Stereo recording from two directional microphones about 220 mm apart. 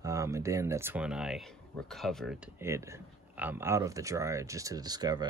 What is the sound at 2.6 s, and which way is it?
Speech, 10° right (ahead or behind).